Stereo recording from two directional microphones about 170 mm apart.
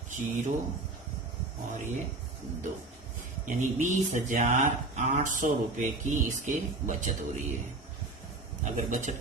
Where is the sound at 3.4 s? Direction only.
45° right (ahead or behind).